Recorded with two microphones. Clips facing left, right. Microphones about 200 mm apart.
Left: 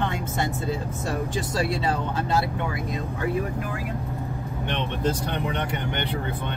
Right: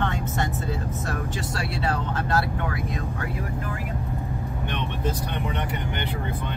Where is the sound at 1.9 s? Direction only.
20° left (ahead or behind).